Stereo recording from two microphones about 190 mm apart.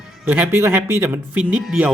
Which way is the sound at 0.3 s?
10° right (ahead or behind).